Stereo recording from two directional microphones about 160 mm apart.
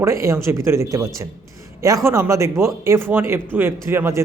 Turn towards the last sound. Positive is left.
turn(degrees=-15)  # may be behind; listen again after turning